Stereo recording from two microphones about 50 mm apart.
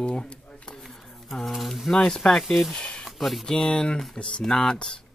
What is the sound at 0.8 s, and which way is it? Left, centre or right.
Speech, centre.